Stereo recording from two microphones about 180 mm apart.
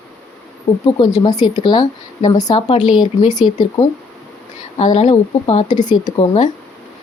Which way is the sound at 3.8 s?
40° left (ahead or behind).